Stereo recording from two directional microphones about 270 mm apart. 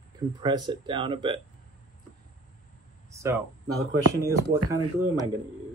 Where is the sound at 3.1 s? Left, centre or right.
Centre.